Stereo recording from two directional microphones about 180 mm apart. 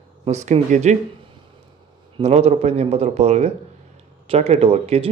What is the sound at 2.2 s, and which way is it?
A man's voice, 35° right (ahead or behind).